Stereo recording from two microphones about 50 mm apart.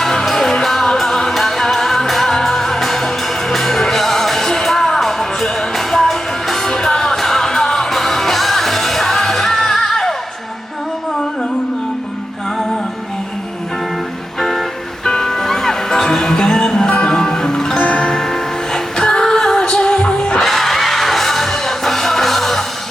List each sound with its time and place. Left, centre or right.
0.0 s music: centre
15.0 s music: centre
20.4 s music: centre